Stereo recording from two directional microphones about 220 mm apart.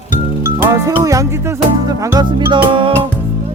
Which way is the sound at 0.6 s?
15° right (ahead or behind).